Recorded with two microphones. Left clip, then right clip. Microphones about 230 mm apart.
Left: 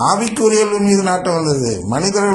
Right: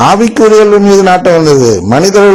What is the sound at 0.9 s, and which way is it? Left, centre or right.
A man's voice, right.